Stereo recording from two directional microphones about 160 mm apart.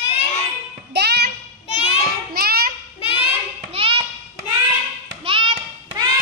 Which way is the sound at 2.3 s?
70° right (ahead or behind).